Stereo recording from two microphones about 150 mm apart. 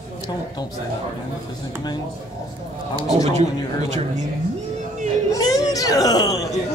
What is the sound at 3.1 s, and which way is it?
Speech, 45° right (ahead or behind).